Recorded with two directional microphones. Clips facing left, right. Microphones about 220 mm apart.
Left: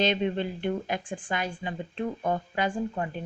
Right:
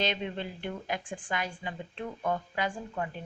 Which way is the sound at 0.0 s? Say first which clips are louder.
Left 6 dB; 25° left (ahead or behind).